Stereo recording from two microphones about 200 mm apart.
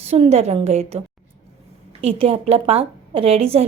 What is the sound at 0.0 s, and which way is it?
A woman's voice, 30° right (ahead or behind).